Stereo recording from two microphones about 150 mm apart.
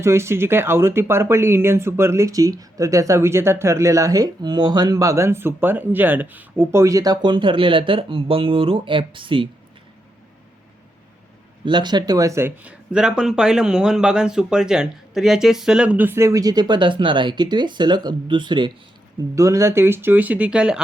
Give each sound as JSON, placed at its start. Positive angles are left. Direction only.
{"t": 0.0, "sound": "speech", "side_deg": -15}
{"t": 11.6, "sound": "speech", "side_deg": -30}
{"t": 19.4, "sound": "speech", "side_deg": -20}